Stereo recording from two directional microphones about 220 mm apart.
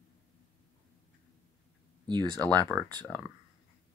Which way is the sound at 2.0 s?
20° right (ahead or behind).